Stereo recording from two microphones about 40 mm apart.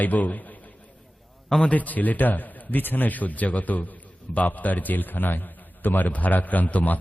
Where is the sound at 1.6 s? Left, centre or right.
Left.